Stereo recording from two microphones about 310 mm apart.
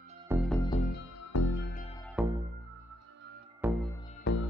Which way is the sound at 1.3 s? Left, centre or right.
Left.